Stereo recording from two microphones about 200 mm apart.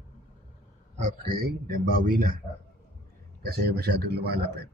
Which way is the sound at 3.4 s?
50° right (ahead or behind).